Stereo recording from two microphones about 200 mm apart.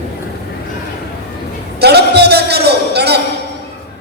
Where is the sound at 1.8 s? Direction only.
55° right (ahead or behind).